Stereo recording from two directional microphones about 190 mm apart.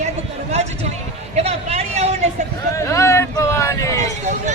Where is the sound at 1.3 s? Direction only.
35° right (ahead or behind).